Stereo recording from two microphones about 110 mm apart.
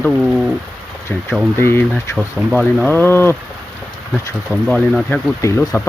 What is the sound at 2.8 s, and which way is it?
Speech, 15° left (ahead or behind).